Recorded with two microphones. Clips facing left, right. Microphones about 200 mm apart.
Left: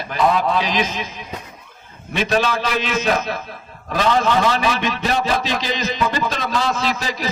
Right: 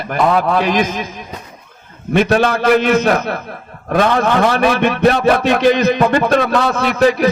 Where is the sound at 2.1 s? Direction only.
55° right (ahead or behind).